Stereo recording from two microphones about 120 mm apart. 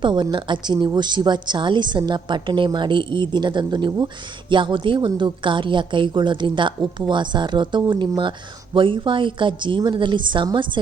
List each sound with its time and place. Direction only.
0.0 s a woman's voice: 40° right (ahead or behind)